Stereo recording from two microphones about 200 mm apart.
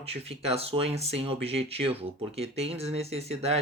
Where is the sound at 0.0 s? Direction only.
30° right (ahead or behind).